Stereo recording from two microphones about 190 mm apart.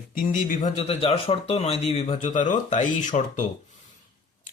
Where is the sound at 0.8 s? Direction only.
30° left (ahead or behind).